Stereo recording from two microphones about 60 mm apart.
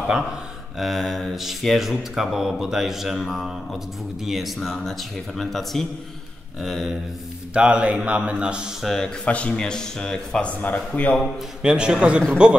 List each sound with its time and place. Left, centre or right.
0.7 s speech: centre
7.5 s a man's voice: right
8.8 s a man's voice: centre
9.2 s a man's voice: left
10.6 s speech: left
11.6 s a man's voice: centre